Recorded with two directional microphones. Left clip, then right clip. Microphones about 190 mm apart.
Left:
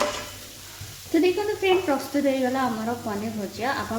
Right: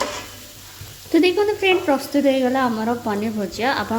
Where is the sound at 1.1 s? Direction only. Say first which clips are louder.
Right 5 dB; 30° right (ahead or behind).